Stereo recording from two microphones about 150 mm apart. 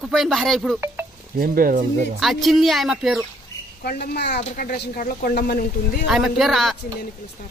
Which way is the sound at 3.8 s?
90° left.